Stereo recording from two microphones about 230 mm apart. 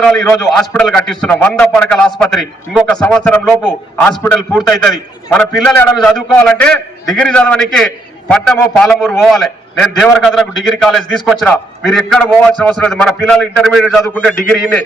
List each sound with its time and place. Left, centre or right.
0.0 s a man's voice: centre